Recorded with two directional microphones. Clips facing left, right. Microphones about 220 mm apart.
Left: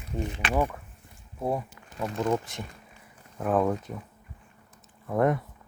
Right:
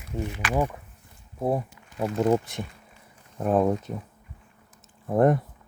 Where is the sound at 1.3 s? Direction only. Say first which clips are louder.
Right 3 dB; 25° right (ahead or behind).